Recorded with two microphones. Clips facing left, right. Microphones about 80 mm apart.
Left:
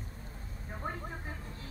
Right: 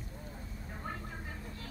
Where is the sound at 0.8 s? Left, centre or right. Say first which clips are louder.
Left 3 dB; left.